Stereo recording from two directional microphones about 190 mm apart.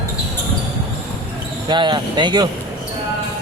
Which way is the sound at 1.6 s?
25° right (ahead or behind).